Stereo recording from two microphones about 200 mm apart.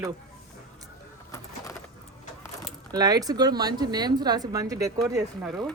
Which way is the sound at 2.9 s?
20° right (ahead or behind).